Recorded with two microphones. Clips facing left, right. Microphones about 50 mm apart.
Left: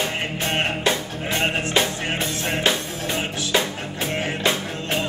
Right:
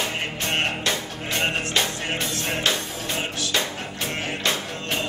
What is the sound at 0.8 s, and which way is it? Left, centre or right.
Music, centre.